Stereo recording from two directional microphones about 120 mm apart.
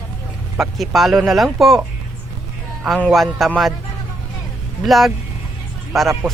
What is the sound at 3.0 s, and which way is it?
Speech, centre (ahead or behind).